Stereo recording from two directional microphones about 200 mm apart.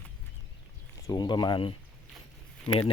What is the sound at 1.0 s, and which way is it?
Speech, 20° left (ahead or behind).